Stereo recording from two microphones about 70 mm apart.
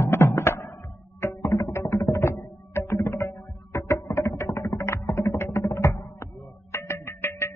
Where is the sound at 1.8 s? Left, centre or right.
Left.